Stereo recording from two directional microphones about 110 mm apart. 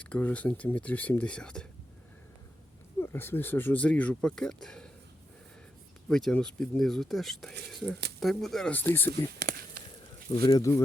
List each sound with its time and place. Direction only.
0.0 s speech: 15° left (ahead or behind)
3.0 s speech: 20° left (ahead or behind)
6.1 s speech: 5° left (ahead or behind)
8.7 s speech: 20° left (ahead or behind)
10.3 s speech: 45° left (ahead or behind)
10.6 s speech: 30° left (ahead or behind)